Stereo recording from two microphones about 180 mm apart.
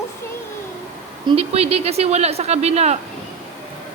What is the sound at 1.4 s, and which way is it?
A woman's voice, 35° right (ahead or behind).